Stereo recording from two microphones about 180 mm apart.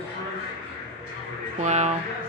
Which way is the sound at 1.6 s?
40° right (ahead or behind).